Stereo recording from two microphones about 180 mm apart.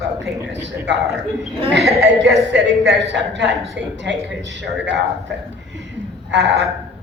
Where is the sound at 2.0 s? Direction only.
75° right (ahead or behind).